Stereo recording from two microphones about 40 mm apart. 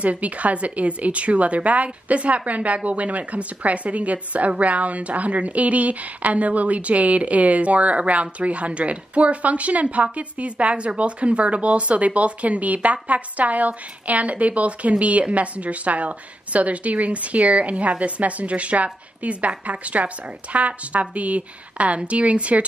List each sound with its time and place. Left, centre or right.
0.0 s a woman's voice: right